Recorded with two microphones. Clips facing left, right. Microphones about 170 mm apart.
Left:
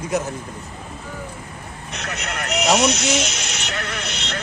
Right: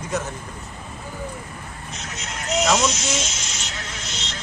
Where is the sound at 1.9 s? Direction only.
70° left (ahead or behind).